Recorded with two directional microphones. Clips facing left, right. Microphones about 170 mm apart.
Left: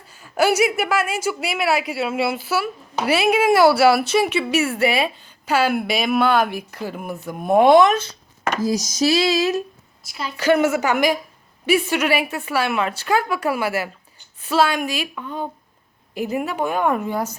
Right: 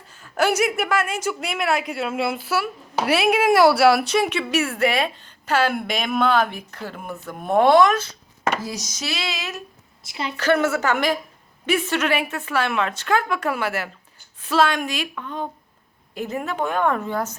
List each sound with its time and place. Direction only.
0.1 s a woman's voice: 10° left (ahead or behind); by 8.1 s 25° left (ahead or behind)
8.6 s a sound: 40° left (ahead or behind)
10.1 s a woman's voice: 25° right (ahead or behind)
10.3 s a woman's voice: 10° left (ahead or behind)